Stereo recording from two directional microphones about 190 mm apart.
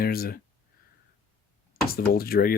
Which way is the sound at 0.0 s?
50° left (ahead or behind).